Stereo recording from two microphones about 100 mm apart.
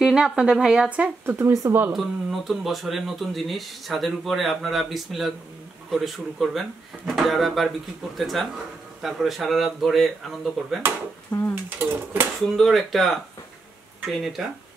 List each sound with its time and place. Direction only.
0.0 s speech: 5° right (ahead or behind)
1.4 s speech: 30° right (ahead or behind)
1.9 s speech: centre (ahead or behind)
11.3 s speech: 45° left (ahead or behind)
12.5 s speech: centre (ahead or behind)